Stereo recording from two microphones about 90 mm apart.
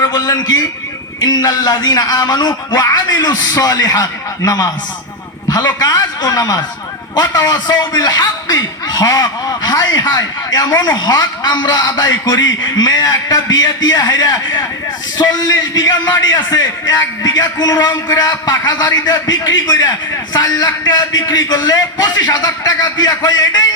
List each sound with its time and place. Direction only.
0.1 s a man's voice: 50° left (ahead or behind)